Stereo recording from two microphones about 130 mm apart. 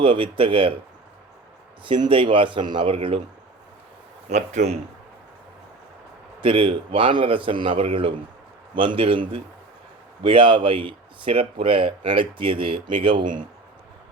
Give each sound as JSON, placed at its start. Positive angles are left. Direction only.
{"t": 0.0, "sound": "speech", "side_deg": -40}
{"t": 1.8, "sound": "speech", "side_deg": -40}
{"t": 4.3, "sound": "speech", "side_deg": -60}
{"t": 6.4, "sound": "a man's voice", "side_deg": -40}